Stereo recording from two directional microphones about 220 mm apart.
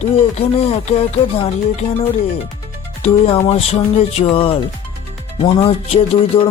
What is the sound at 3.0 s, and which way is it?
Speech, 25° left (ahead or behind).